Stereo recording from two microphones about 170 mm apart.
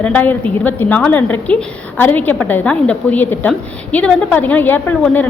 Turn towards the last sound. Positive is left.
turn(degrees=10)  # may be behind; listen again after turning